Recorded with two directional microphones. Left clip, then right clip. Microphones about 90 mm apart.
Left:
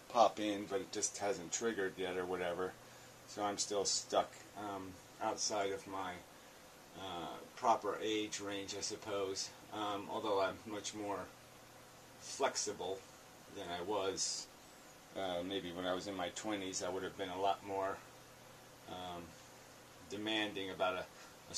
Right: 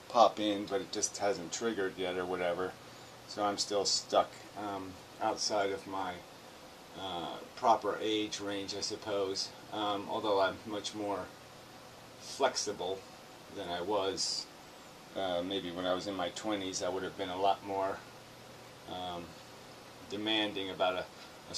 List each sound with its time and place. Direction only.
0.1 s speech: 10° left (ahead or behind)
12.4 s speech: 25° left (ahead or behind)